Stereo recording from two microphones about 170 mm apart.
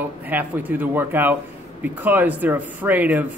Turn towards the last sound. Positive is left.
turn(degrees=-10)  # may be behind; listen again after turning